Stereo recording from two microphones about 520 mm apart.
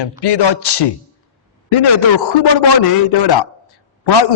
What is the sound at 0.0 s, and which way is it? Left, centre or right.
Speech, left.